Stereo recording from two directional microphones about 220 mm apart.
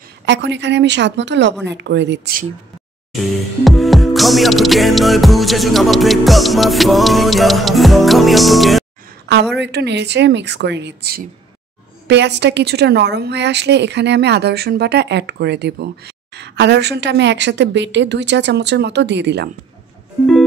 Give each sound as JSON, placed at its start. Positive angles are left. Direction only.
{"t": 0.2, "sound": "a woman's voice", "side_deg": -55}
{"t": 3.6, "sound": "music", "side_deg": 0}
{"t": 9.6, "sound": "a woman's voice", "side_deg": -50}